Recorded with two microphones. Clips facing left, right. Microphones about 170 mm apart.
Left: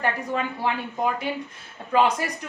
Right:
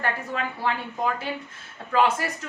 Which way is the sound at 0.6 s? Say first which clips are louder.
Left 1 dB; 15° left (ahead or behind).